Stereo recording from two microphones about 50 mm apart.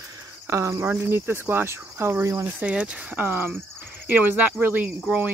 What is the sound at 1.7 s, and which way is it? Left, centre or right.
Speech, right.